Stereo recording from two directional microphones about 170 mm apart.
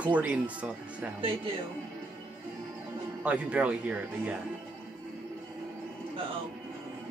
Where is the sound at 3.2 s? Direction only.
10° right (ahead or behind).